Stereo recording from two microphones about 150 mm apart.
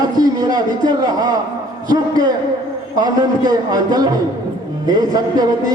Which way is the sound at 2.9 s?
25° right (ahead or behind).